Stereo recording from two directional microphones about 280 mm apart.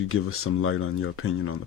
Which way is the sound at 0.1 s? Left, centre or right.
Left.